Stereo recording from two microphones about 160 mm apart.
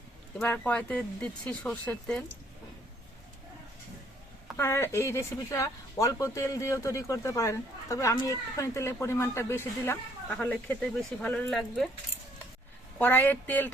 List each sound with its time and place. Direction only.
0.3 s speech: 10° left (ahead or behind)
4.5 s speech: 15° left (ahead or behind)
13.0 s speech: 10° left (ahead or behind)